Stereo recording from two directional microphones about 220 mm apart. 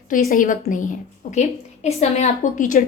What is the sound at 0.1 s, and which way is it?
A woman's voice, 40° left (ahead or behind).